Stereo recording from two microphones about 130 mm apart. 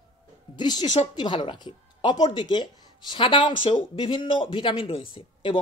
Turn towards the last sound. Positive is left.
turn(degrees=45)  # may be behind; listen again after turning